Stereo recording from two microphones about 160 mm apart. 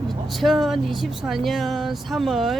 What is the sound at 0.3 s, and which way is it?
Speech, centre (ahead or behind).